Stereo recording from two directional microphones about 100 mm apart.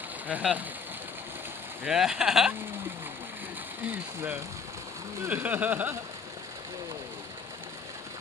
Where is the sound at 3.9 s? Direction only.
20° right (ahead or behind).